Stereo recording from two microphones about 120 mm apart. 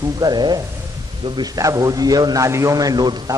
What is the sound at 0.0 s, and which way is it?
A man's voice, 35° right (ahead or behind).